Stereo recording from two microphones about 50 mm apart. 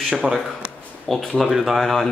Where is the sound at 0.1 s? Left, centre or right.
Centre.